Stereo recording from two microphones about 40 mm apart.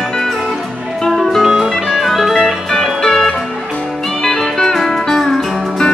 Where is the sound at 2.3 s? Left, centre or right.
Centre.